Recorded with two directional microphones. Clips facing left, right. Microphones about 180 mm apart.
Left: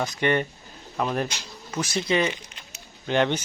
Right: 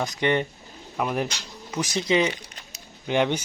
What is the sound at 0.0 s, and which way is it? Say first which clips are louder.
Speech: even; 15° right (ahead or behind).